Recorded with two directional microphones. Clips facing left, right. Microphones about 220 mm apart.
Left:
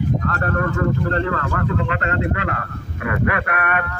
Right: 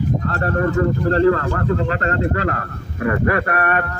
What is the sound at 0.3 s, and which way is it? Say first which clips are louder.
Speech: right 3 dB; 30° right (ahead or behind).